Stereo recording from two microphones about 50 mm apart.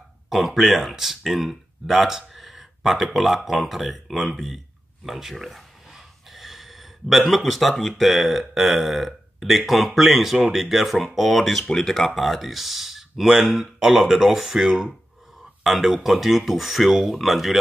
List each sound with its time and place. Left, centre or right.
0.3 s speech: centre
5.0 s a sound: centre
8.0 s speech: centre